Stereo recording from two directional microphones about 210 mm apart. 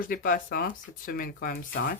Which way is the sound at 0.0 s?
40° left (ahead or behind).